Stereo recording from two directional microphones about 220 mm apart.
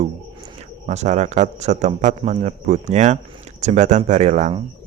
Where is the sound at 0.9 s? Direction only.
30° right (ahead or behind).